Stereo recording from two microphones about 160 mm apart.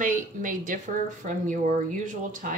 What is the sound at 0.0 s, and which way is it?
A woman's voice, 55° right (ahead or behind).